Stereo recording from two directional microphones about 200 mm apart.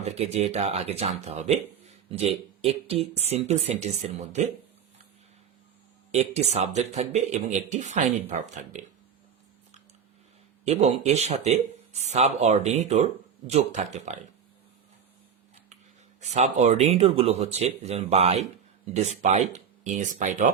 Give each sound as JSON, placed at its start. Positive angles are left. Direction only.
{"t": 0.0, "sound": "speech", "side_deg": -30}
{"t": 6.1, "sound": "speech", "side_deg": -35}
{"t": 10.7, "sound": "speech", "side_deg": -35}
{"t": 16.2, "sound": "speech", "side_deg": -35}